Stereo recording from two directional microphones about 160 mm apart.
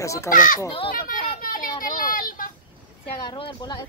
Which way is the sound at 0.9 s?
60° left (ahead or behind).